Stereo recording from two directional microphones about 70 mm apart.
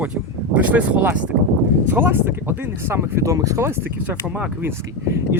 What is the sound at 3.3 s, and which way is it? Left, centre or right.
Speech, right.